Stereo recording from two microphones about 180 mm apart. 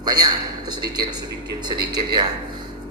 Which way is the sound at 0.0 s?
20° right (ahead or behind).